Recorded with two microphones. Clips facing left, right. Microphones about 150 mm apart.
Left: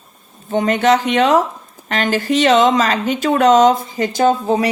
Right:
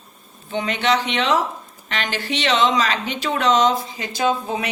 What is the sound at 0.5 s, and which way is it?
Speech, 45° left (ahead or behind).